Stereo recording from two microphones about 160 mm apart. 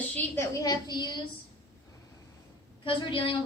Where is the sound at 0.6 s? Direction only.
25° left (ahead or behind).